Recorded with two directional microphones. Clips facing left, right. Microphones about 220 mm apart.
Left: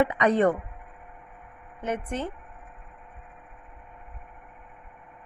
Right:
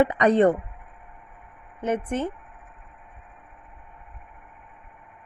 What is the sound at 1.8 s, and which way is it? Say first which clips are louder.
Speech: right 5 dB; 20° right (ahead or behind).